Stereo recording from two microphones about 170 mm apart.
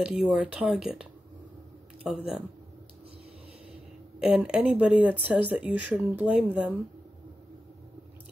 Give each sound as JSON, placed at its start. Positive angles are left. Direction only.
{"t": 0.0, "sound": "speech", "side_deg": -5}
{"t": 2.0, "sound": "speech", "side_deg": 0}
{"t": 4.2, "sound": "speech", "side_deg": -5}